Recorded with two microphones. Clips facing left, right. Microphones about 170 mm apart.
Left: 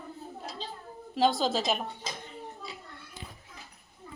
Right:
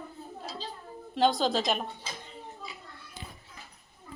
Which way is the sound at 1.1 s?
5° left (ahead or behind).